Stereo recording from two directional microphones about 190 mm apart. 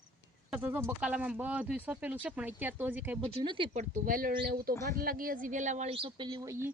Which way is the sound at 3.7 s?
45° right (ahead or behind).